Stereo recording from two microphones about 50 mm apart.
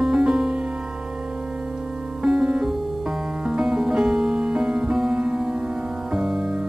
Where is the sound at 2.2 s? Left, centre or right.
Centre.